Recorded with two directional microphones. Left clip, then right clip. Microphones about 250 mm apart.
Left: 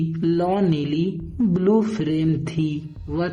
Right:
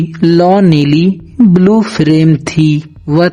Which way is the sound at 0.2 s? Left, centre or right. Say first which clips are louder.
Right 13 dB; right.